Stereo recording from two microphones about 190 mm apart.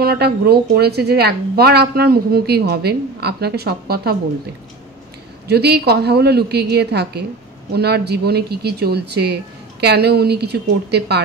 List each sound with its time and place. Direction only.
0.0 s speech: 55° right (ahead or behind)
5.5 s speech: 60° right (ahead or behind)